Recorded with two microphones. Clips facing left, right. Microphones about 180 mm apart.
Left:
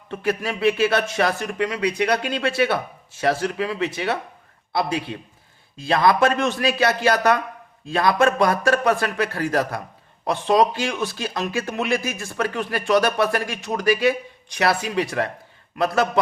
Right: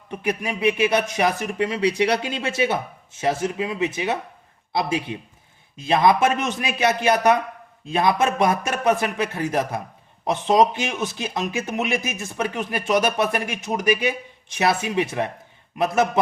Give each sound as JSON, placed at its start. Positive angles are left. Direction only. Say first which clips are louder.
{"t": 0.1, "sound": "speech", "louder": "left 1 dB", "side_deg": -15}